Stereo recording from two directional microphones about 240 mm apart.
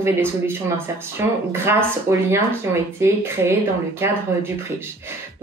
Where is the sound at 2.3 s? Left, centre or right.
Centre.